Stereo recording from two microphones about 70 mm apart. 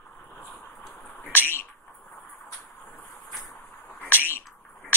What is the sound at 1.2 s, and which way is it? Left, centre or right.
Bird, right.